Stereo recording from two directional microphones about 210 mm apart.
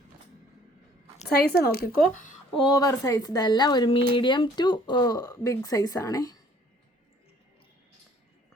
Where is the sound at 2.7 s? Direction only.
15° left (ahead or behind).